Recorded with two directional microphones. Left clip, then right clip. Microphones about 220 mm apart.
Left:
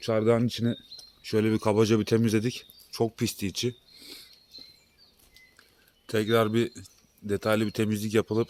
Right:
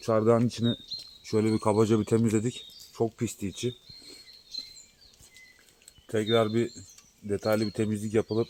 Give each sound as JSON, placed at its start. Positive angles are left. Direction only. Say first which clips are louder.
{"t": 0.0, "sound": "speech", "louder": "right 1 dB", "side_deg": -5}
{"t": 6.1, "sound": "speech", "louder": "left 1 dB", "side_deg": 15}